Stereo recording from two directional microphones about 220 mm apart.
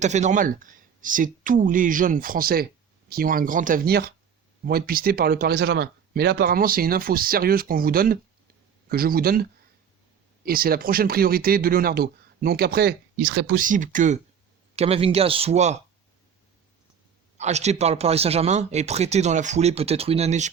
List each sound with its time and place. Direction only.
0.0 s speech: 30° right (ahead or behind)
17.3 s speech: 30° right (ahead or behind)